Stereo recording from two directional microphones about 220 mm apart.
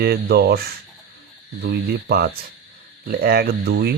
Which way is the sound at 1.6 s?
45° right (ahead or behind).